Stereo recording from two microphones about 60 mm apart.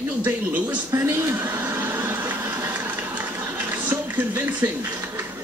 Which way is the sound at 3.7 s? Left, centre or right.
Right.